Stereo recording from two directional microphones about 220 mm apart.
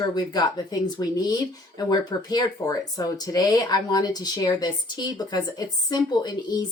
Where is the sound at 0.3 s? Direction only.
20° left (ahead or behind).